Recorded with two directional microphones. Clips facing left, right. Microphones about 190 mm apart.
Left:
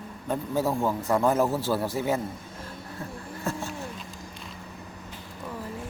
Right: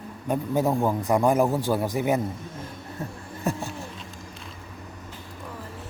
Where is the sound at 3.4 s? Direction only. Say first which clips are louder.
Right 4 dB; 15° right (ahead or behind).